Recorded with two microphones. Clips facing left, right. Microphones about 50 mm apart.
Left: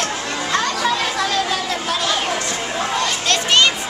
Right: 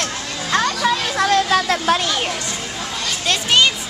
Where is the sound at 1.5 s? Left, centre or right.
Right.